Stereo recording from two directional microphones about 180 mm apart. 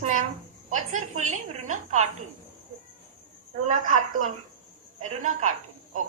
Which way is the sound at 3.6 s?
45° right (ahead or behind).